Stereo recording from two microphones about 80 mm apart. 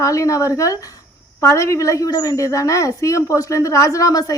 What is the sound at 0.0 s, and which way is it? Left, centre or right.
A woman's voice, left.